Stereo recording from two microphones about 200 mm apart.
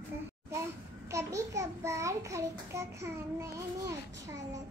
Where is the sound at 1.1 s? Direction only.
15° right (ahead or behind).